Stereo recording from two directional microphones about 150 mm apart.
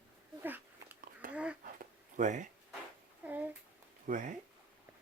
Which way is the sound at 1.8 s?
55° right (ahead or behind).